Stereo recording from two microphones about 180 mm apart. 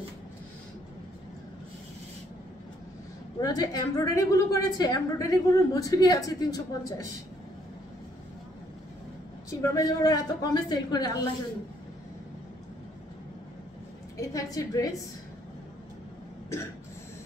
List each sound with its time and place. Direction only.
3.3 s a woman's voice: 20° left (ahead or behind)
9.5 s a woman's voice: 20° left (ahead or behind)
14.1 s a woman's voice: 20° left (ahead or behind)